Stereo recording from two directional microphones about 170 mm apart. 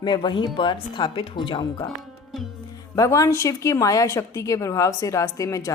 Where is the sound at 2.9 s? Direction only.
20° left (ahead or behind).